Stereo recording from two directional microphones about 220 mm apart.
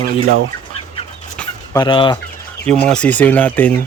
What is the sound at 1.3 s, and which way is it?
Fowl, 15° left (ahead or behind).